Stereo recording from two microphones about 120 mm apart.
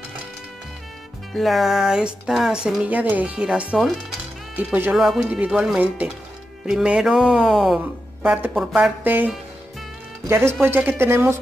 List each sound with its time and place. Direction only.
1.3 s speech: centre (ahead or behind)
8.2 s a woman's voice: 15° right (ahead or behind)
8.5 s speech: 5° right (ahead or behind)
9.0 s speech: 15° right (ahead or behind)